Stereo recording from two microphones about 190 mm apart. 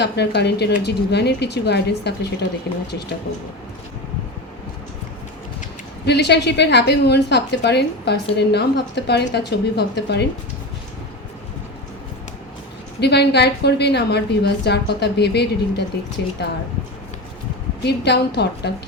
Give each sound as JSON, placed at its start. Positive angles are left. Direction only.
{"t": 0.0, "sound": "a woman's voice", "side_deg": 60}
{"t": 6.1, "sound": "a woman's voice", "side_deg": 60}
{"t": 13.0, "sound": "a woman's voice", "side_deg": 60}
{"t": 17.8, "sound": "a woman's voice", "side_deg": 60}